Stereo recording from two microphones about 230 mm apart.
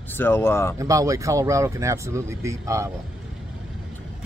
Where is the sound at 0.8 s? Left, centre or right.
Centre.